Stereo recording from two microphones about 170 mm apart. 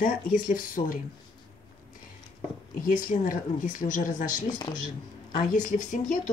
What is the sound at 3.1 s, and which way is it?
Speech, 50° left (ahead or behind).